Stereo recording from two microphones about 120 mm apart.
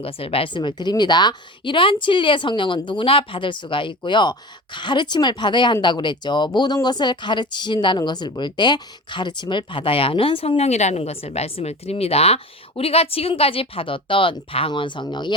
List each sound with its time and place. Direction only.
0.0 s a woman's voice: 50° left (ahead or behind)